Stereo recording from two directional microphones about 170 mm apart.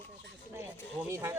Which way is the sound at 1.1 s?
15° right (ahead or behind).